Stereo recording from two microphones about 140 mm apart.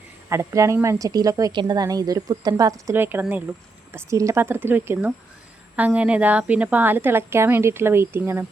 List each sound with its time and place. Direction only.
0.3 s a woman's voice: 20° right (ahead or behind)